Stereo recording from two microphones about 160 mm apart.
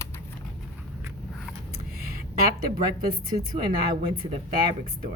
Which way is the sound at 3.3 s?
35° right (ahead or behind).